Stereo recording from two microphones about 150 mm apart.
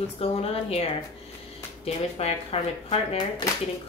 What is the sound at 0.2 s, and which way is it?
Speech, 40° left (ahead or behind).